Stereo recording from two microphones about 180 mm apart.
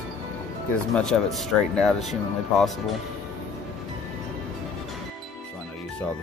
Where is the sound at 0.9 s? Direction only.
Centre (ahead or behind).